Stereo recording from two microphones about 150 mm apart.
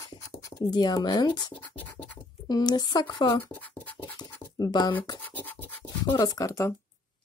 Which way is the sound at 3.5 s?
10° left (ahead or behind).